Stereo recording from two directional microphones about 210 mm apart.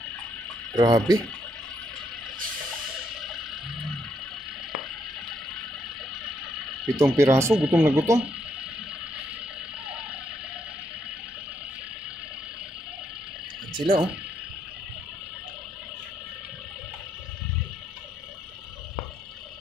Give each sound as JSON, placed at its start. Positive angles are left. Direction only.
{"t": 0.7, "sound": "speech", "side_deg": -20}
{"t": 7.0, "sound": "speech", "side_deg": -15}
{"t": 13.7, "sound": "speech", "side_deg": -20}